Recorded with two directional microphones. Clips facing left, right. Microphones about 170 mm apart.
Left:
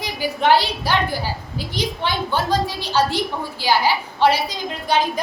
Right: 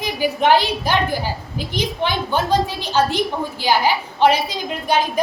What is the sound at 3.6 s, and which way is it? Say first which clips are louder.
Speech: right 1 dB; 15° right (ahead or behind).